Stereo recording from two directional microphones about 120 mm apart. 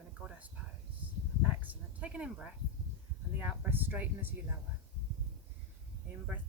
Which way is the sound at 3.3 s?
10° right (ahead or behind).